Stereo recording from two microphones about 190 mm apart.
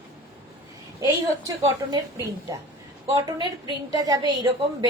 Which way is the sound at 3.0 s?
20° right (ahead or behind).